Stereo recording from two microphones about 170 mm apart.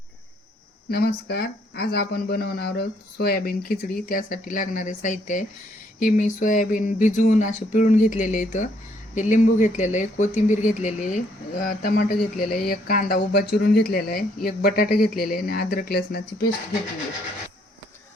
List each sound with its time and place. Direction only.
0.9 s speech: 75° left (ahead or behind); by 5.5 s 45° left (ahead or behind)
6.0 s a sound: 50° left (ahead or behind)
11.6 s speech: 60° left (ahead or behind)